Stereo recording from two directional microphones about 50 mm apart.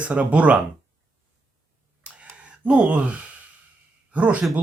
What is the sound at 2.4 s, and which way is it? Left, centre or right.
Speech, right.